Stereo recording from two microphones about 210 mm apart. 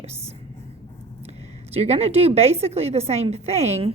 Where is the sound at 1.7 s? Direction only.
30° right (ahead or behind).